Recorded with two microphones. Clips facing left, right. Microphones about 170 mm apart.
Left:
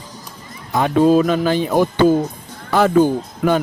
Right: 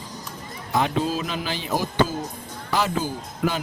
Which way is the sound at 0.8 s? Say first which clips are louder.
Left 10 dB; 50° left (ahead or behind).